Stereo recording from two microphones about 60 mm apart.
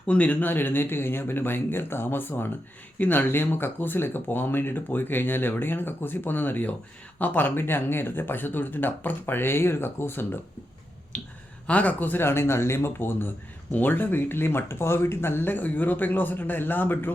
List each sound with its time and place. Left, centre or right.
0.1 s speech: left
11.1 s speech: centre
12.2 s speech: left